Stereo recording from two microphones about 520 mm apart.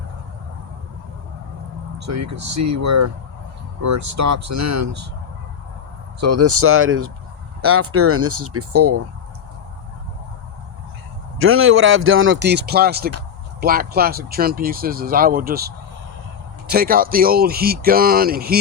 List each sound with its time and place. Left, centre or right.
2.0 s speech: right
6.1 s speech: right
11.3 s a man's voice: right